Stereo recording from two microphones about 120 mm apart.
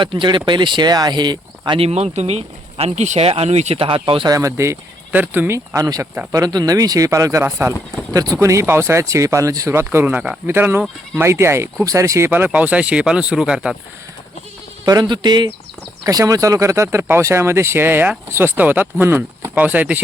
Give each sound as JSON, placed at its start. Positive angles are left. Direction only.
{"t": 0.0, "sound": "speech", "side_deg": -40}
{"t": 1.8, "sound": "speech", "side_deg": -60}
{"t": 3.8, "sound": "speech", "side_deg": -45}
{"t": 4.3, "sound": "speech", "side_deg": -25}
{"t": 14.8, "sound": "speech", "side_deg": -35}